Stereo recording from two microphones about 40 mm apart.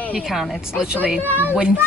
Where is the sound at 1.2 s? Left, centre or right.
Left.